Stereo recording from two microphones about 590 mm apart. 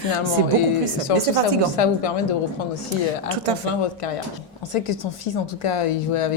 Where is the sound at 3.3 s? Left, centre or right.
Right.